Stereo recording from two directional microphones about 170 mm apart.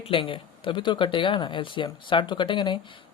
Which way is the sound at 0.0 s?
30° left (ahead or behind).